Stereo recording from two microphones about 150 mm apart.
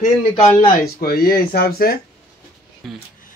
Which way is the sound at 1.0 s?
90° left.